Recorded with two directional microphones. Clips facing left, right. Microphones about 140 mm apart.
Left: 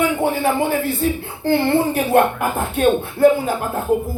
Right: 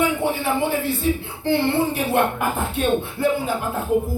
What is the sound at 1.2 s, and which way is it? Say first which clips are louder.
Speech: left 2 dB; 45° left (ahead or behind).